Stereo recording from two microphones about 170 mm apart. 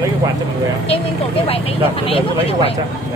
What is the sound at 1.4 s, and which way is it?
Speech, 35° left (ahead or behind).